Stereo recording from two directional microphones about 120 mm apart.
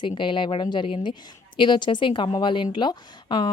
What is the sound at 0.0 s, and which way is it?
Speech, 40° left (ahead or behind).